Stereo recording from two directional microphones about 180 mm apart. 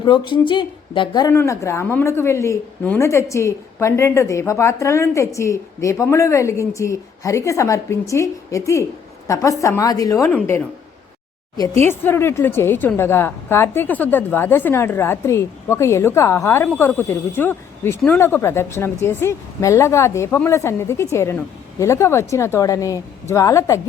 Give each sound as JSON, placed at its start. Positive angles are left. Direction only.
{"t": 0.0, "sound": "speech", "side_deg": 25}
{"t": 1.3, "sound": "speech", "side_deg": 15}